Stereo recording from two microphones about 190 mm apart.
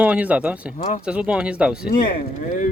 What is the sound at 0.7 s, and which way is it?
Speech, 40° left (ahead or behind).